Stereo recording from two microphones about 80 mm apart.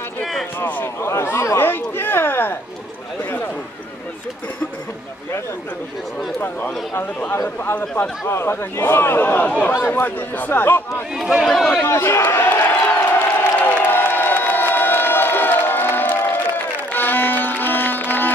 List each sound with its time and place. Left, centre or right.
0.2 s a sound: centre
0.6 s a sound: left
6.4 s a man's voice: left
8.3 s a man's voice: left
11.1 s speech: centre
11.8 s crowd: left